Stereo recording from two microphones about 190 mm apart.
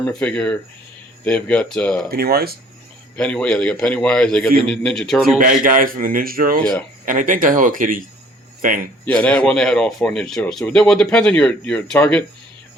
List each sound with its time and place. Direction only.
0.0 s a man's voice: 5° left (ahead or behind)
2.0 s a man's voice: 55° right (ahead or behind)
3.2 s a man's voice: 5° left (ahead or behind)
5.4 s a man's voice: 45° right (ahead or behind)
6.6 s a man's voice: 5° left (ahead or behind)
7.0 s a man's voice: 45° right (ahead or behind)
9.0 s a man's voice: 5° left (ahead or behind)